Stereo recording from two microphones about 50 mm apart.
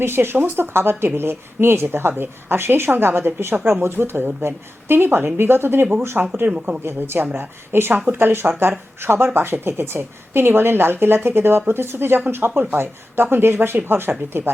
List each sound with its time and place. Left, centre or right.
0.0 s speech: right
6.4 s speech: right
6.8 s speech: right